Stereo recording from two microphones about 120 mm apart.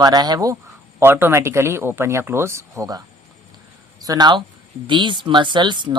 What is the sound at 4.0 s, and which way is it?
Speech, 35° right (ahead or behind).